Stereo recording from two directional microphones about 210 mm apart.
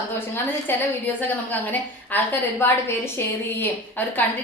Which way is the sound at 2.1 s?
10° left (ahead or behind).